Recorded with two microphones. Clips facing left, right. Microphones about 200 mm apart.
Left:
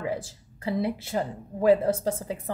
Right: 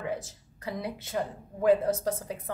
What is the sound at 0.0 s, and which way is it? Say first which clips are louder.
Speech: left 3 dB; 30° left (ahead or behind).